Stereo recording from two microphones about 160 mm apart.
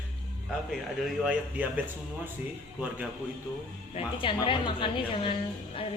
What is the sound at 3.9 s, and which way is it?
Speech, 30° left (ahead or behind).